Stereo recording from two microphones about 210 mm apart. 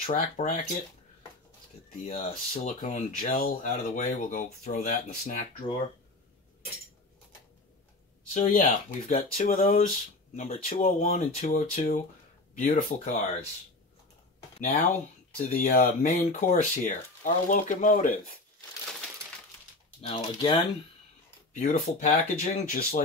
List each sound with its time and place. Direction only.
0.0 s speech: 35° left (ahead or behind)
2.0 s speech: 35° left (ahead or behind)
8.3 s speech: 40° left (ahead or behind)
14.6 s speech: 35° left (ahead or behind)
20.2 s speech: 20° left (ahead or behind)
21.5 s speech: 40° left (ahead or behind)